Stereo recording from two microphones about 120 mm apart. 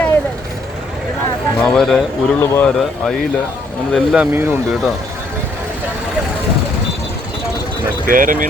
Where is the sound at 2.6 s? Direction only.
5° left (ahead or behind).